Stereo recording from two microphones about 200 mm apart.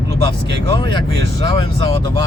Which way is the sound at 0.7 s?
25° left (ahead or behind).